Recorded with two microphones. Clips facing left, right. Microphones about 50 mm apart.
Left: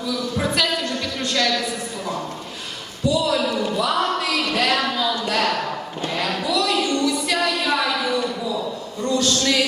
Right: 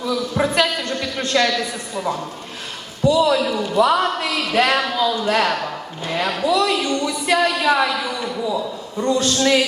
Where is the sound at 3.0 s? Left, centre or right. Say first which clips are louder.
Right 4 dB; centre.